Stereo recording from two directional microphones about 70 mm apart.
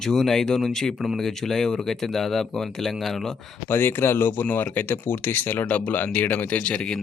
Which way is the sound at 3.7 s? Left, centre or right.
Left.